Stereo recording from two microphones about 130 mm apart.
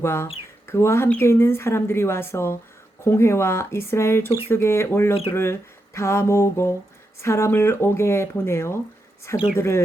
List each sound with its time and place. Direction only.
0.0 s speech: 20° left (ahead or behind)